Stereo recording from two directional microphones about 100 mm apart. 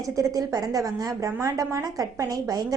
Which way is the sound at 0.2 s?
35° right (ahead or behind).